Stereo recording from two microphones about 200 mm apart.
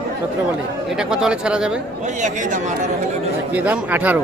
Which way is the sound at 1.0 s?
5° right (ahead or behind).